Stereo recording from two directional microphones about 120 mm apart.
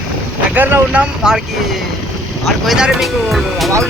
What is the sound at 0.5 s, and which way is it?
Speech, 15° right (ahead or behind).